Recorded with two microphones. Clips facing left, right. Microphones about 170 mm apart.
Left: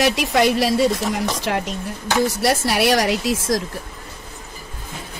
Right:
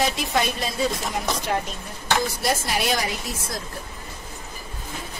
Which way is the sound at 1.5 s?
70° left (ahead or behind).